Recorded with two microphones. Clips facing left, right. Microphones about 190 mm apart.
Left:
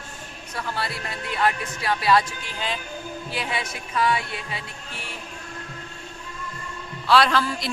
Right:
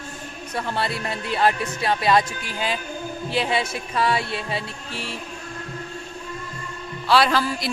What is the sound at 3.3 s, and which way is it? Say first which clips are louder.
Speech: right 7 dB; 30° right (ahead or behind).